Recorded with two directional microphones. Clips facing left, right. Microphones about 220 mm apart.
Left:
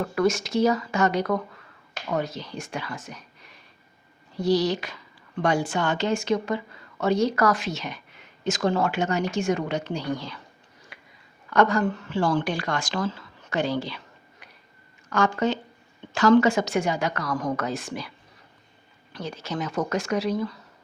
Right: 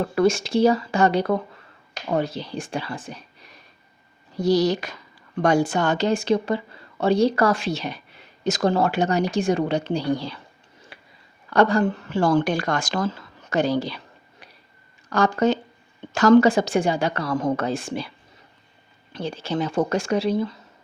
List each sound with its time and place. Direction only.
0.0 s a woman's voice: 30° right (ahead or behind)
4.4 s a woman's voice: 45° right (ahead or behind)
10.9 s a sound: 30° right (ahead or behind)
11.5 s a woman's voice: 30° right (ahead or behind)
19.1 s speech: 30° right (ahead or behind)